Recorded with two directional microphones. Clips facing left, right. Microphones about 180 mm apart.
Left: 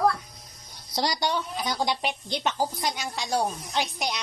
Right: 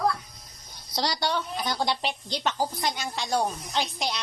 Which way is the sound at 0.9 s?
15° left (ahead or behind).